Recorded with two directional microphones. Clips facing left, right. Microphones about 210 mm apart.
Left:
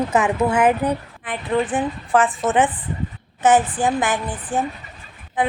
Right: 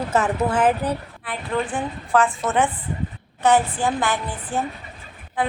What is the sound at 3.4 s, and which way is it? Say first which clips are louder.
Speech: left 2 dB; 20° left (ahead or behind).